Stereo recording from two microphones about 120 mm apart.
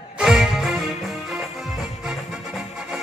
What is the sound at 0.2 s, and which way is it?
Music, 5° right (ahead or behind).